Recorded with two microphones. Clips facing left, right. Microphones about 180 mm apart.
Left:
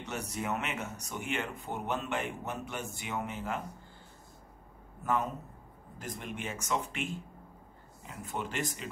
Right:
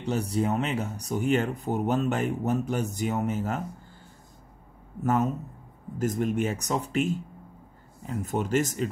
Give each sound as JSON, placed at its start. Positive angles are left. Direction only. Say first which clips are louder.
{"t": 0.0, "sound": "speech", "louder": "right 10 dB", "side_deg": -30}
{"t": 5.0, "sound": "speech", "louder": "right 7 dB", "side_deg": -45}